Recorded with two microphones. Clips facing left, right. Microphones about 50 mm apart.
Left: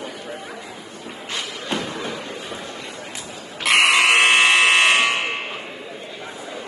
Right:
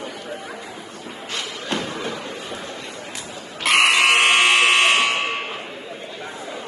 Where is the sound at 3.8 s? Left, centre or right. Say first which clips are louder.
Left 1 dB; left.